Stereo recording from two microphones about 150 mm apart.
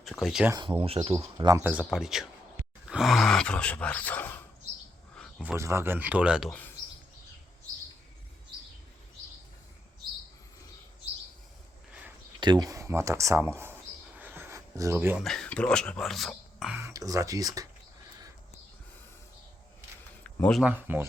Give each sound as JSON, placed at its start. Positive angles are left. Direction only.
{"t": 0.0, "sound": "speech", "side_deg": 0}
{"t": 0.5, "sound": "speech", "side_deg": -35}
{"t": 1.2, "sound": "speech", "side_deg": -25}
{"t": 1.8, "sound": "speech", "side_deg": 0}
{"t": 5.4, "sound": "speech", "side_deg": -15}
{"t": 6.5, "sound": "speech", "side_deg": 10}
{"t": 12.4, "sound": "speech", "side_deg": -30}
{"t": 14.2, "sound": "a sound", "side_deg": -15}
{"t": 15.2, "sound": "speech", "side_deg": 5}
{"t": 16.7, "sound": "speech", "side_deg": -20}
{"t": 20.2, "sound": "a sound", "side_deg": 10}
{"t": 20.6, "sound": "speech", "side_deg": -10}